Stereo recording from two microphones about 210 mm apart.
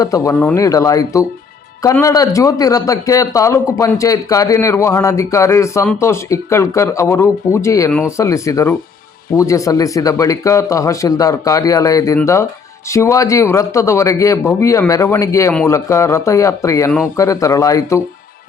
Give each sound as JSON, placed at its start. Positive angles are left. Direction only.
{"t": 0.0, "sound": "a man's voice", "side_deg": 15}